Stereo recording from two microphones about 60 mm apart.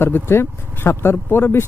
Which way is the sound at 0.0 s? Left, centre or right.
Left.